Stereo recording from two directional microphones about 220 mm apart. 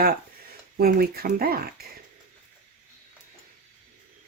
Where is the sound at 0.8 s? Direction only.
45° right (ahead or behind).